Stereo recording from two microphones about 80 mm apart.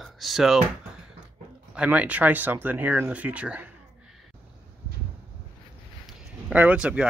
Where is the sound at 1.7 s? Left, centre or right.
Centre.